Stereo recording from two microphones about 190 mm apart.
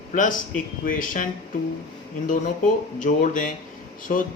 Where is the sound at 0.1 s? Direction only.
45° left (ahead or behind).